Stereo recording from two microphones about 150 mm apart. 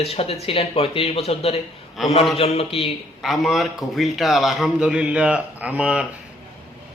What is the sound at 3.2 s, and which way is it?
A man's voice, centre (ahead or behind).